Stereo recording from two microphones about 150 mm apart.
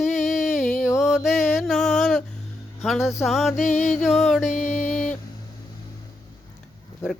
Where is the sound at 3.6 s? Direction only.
55° left (ahead or behind).